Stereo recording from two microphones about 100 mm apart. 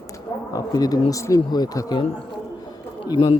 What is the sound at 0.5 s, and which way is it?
Speech, 40° left (ahead or behind).